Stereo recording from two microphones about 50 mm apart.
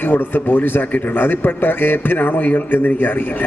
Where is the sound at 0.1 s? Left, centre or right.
Left.